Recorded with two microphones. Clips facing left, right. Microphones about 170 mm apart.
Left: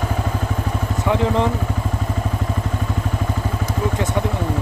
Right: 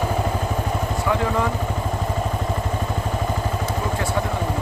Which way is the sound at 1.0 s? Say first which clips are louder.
Left 4 dB; 20° left (ahead or behind).